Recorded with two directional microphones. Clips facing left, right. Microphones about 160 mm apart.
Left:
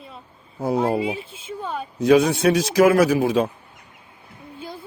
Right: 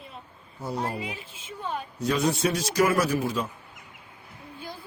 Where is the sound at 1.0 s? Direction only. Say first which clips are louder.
Left 10 dB; 30° left (ahead or behind).